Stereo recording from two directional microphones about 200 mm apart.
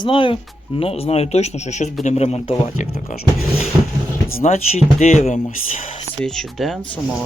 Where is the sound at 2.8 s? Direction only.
45° left (ahead or behind).